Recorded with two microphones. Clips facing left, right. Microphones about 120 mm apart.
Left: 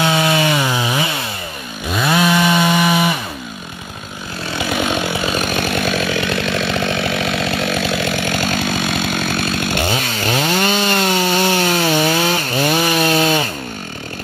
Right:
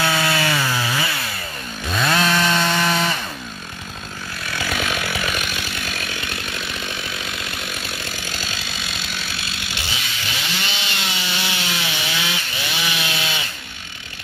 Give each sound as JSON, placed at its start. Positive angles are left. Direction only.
{"t": 0.0, "sound": "chainsaw", "side_deg": 20}
{"t": 4.5, "sound": "chainsaw", "side_deg": 20}
{"t": 5.4, "sound": "chainsaw", "side_deg": 55}